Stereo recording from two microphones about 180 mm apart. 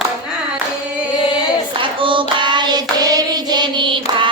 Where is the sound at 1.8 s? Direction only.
30° right (ahead or behind).